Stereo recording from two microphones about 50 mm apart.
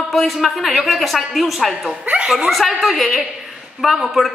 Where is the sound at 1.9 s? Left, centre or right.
Right.